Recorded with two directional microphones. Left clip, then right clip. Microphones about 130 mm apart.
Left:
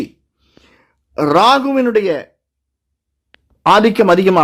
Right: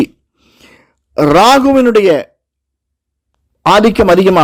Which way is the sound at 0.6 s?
50° right (ahead or behind).